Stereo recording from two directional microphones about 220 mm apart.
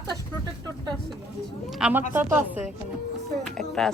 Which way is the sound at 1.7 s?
5° right (ahead or behind).